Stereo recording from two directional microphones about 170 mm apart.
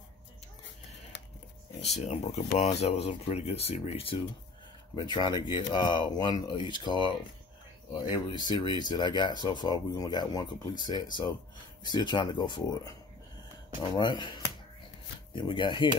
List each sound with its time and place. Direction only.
1.9 s speech: 40° left (ahead or behind)
15.3 s speech: 30° left (ahead or behind)